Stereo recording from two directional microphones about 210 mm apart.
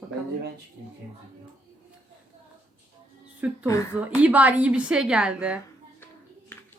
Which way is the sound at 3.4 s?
5° right (ahead or behind).